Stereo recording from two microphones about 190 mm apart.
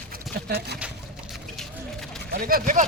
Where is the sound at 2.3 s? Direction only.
50° right (ahead or behind).